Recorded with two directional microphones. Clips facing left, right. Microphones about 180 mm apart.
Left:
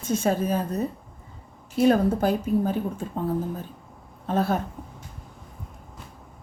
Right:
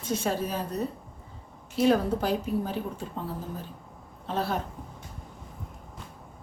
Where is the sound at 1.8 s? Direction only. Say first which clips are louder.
Left 4 dB; 50° left (ahead or behind).